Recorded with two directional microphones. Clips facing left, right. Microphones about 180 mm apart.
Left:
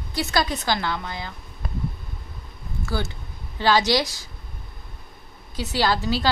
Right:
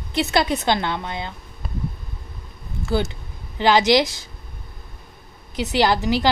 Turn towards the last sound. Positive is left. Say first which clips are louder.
# right 4 dB
turn(degrees=-15)  # may be behind; listen again after turning